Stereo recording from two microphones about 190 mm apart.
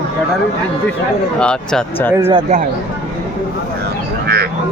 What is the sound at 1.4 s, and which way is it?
Speech, 5° left (ahead or behind).